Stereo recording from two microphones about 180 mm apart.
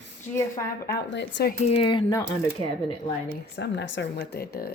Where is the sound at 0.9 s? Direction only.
70° left (ahead or behind).